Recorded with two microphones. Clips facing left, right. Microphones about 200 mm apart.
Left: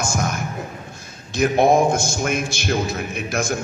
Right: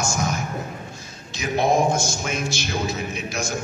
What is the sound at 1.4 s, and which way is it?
A man's voice, 55° left (ahead or behind).